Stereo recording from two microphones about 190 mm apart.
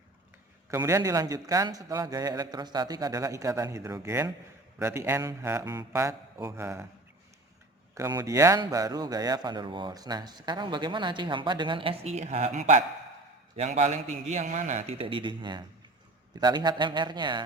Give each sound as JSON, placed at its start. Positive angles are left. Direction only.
{"t": 0.7, "sound": "a man's voice", "side_deg": -15}
{"t": 7.9, "sound": "a man's voice", "side_deg": -15}